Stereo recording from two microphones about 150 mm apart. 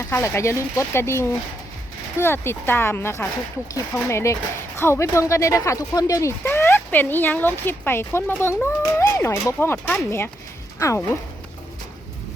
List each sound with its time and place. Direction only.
0.0 s speech: 20° left (ahead or behind)
9.7 s speech: 5° left (ahead or behind)
10.8 s speech: 20° left (ahead or behind)